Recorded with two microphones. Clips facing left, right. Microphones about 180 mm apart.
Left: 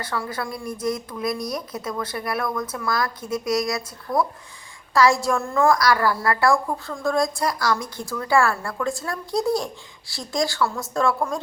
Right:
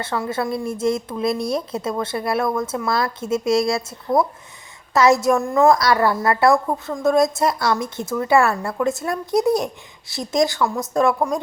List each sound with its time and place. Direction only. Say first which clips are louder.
0.0 s a woman's voice: right 5 dB; 25° right (ahead or behind)